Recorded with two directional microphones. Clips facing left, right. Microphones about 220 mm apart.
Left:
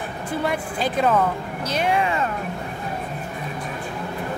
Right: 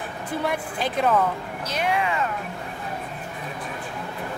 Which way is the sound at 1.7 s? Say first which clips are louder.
Left 3 dB; 30° left (ahead or behind).